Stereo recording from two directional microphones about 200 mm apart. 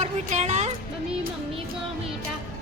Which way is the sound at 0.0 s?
35° right (ahead or behind).